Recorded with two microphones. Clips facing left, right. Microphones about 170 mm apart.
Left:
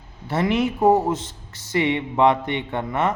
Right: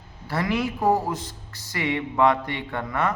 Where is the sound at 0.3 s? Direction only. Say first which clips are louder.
Left 4 dB; 25° left (ahead or behind).